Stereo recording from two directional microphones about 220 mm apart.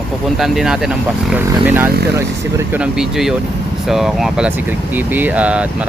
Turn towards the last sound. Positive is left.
turn(degrees=-5)  # may be behind; listen again after turning